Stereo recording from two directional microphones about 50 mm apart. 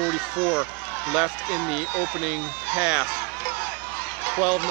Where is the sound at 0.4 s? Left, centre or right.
Right.